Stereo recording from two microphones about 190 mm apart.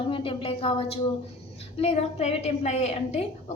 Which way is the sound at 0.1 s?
25° left (ahead or behind).